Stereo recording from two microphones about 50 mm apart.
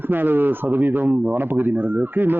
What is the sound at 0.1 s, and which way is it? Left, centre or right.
A man's voice, right.